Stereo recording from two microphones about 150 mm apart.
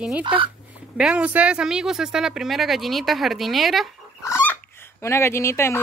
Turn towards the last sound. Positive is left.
turn(degrees=15)  # may be behind; listen again after turning